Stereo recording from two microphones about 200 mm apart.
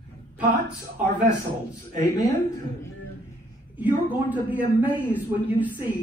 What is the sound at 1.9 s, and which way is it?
Speech, 40° right (ahead or behind).